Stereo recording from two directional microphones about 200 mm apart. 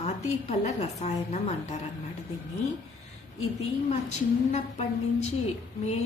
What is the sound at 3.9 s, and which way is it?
A woman's voice, 35° left (ahead or behind).